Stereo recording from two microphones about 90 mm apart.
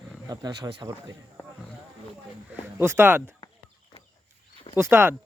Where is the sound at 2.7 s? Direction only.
25° right (ahead or behind).